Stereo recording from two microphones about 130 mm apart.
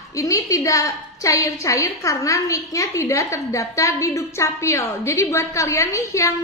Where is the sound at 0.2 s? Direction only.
25° left (ahead or behind).